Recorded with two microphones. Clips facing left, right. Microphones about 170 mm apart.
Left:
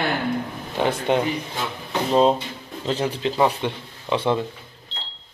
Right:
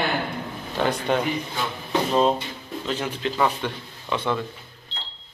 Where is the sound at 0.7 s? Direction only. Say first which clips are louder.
Left 2 dB; 20° left (ahead or behind).